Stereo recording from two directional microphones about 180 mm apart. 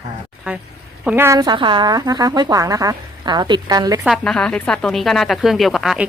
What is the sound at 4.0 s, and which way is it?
A woman's voice, centre (ahead or behind).